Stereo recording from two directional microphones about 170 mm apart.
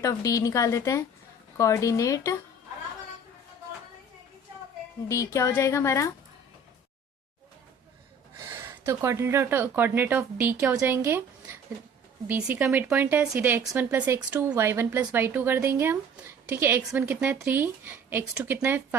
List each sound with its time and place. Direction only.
0.0 s a woman's voice: 20° left (ahead or behind)
5.0 s a woman's voice: 20° left (ahead or behind)
8.9 s speech: 15° right (ahead or behind)